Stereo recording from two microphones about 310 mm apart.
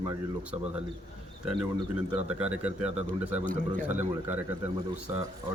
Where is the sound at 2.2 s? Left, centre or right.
Centre.